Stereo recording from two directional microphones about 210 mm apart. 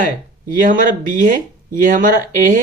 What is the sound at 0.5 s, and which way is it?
Speech, 40° right (ahead or behind).